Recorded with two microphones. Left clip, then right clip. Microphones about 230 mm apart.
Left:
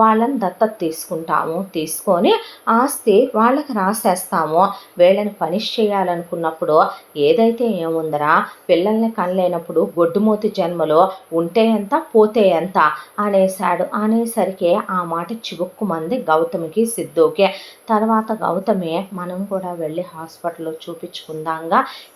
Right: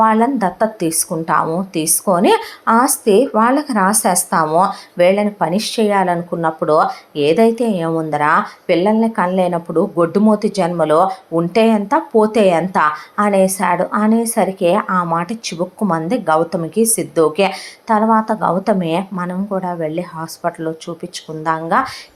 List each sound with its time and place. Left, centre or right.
0.0 s speech: right